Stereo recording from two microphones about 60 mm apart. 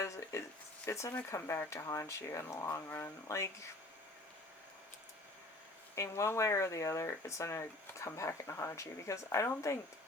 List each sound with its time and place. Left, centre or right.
0.0 s a sound: left
0.9 s speech: left
1.4 s speech: left
6.0 s speech: left